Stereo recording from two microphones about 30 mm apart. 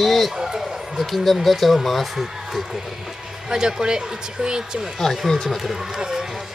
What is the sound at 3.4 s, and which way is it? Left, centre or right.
Speech, right.